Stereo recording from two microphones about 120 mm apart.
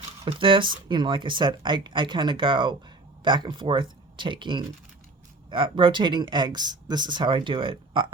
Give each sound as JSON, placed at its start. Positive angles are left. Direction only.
{"t": 0.3, "sound": "speech", "side_deg": -45}